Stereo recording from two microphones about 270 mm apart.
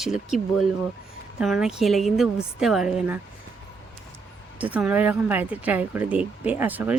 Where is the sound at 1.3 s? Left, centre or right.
Centre.